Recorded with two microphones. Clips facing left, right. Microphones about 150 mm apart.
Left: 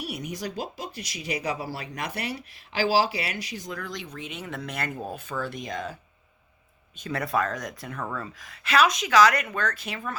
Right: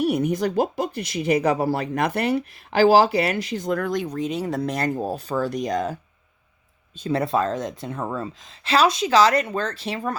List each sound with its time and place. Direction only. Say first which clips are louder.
0.0 s speech: right 12 dB; 55° right (ahead or behind)
6.9 s speech: right 5 dB; 30° right (ahead or behind)